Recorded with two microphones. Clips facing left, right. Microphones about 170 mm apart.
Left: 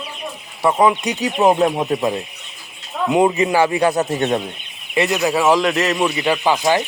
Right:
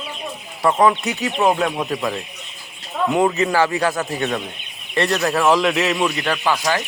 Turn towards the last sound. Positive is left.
turn(degrees=20)  # may be behind; listen again after turning